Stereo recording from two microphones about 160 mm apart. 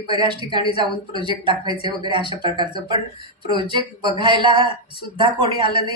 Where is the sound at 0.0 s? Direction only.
30° right (ahead or behind).